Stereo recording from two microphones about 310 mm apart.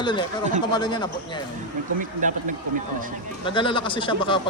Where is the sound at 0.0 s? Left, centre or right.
Centre.